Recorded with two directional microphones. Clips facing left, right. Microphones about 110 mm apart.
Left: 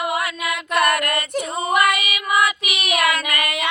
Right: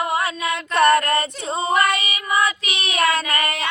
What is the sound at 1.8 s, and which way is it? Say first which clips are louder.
Child singing: left 1 dB; 30° right (ahead or behind).